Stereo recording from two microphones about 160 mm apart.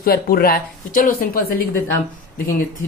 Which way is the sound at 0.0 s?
70° left (ahead or behind).